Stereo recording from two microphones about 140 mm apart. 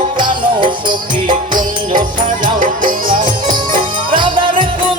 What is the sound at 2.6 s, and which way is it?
Music, 75° right (ahead or behind).